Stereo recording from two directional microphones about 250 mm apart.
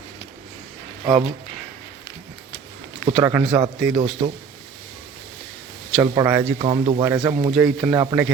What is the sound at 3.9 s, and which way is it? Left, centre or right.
Speech, right.